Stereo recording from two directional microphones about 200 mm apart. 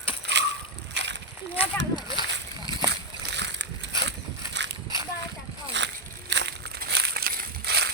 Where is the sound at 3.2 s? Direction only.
60° right (ahead or behind).